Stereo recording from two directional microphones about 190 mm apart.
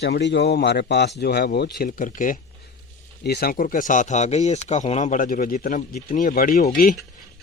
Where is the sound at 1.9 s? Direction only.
45° left (ahead or behind).